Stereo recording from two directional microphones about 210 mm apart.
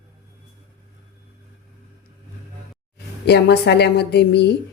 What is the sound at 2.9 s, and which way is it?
A woman's voice, 50° left (ahead or behind).